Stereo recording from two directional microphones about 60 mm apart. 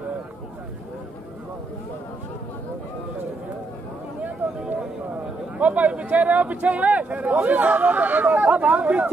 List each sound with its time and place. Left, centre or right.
4.6 s speech: right